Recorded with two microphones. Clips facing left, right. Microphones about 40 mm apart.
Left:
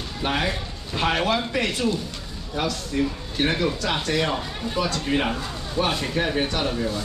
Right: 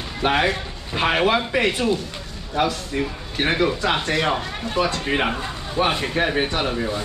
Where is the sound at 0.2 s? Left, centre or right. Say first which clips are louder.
Right 5 dB; right.